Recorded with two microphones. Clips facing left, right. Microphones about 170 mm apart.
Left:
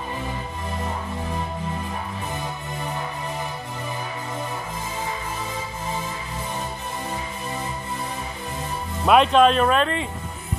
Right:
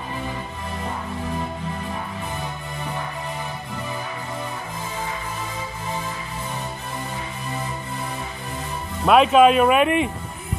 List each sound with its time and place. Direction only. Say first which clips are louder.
9.0 s speech: right 2 dB; centre (ahead or behind)